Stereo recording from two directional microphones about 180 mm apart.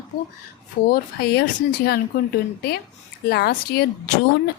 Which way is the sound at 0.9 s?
60° left (ahead or behind).